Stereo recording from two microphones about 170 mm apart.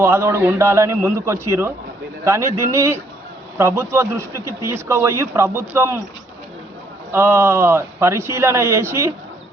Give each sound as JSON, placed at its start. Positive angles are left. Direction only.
{"t": 0.0, "sound": "speech", "side_deg": -15}
{"t": 7.1, "sound": "speech", "side_deg": -15}